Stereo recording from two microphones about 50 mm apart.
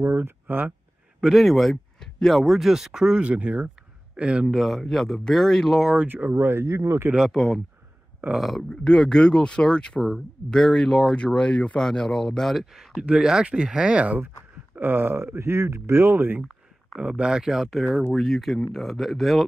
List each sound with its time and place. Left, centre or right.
0.0 s speech: right
1.2 s speech: centre
4.6 s speech: centre
6.0 s speech: right
6.6 s speech: right
7.3 s speech: centre
8.6 s speech: centre
13.0 s speech: centre
14.8 s speech: right
17.0 s speech: centre
18.1 s speech: centre